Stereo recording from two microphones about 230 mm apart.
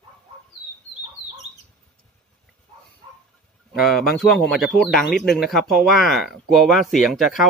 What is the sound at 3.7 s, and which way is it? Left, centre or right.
Speech, centre.